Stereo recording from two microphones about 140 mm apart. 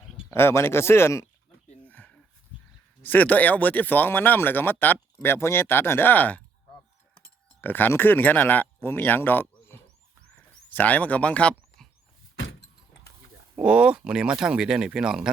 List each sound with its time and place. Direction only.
0.3 s speech: 15° left (ahead or behind)
1.8 s a sound: 10° left (ahead or behind)
3.0 s speech: 10° left (ahead or behind)
7.6 s speech: 15° left (ahead or behind)
10.3 s a sound: 10° left (ahead or behind)
13.6 s speech: 10° right (ahead or behind)